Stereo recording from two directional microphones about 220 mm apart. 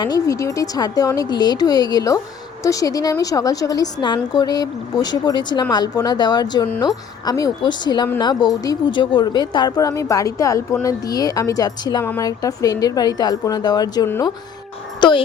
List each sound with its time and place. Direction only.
0.0 s speech: 15° left (ahead or behind)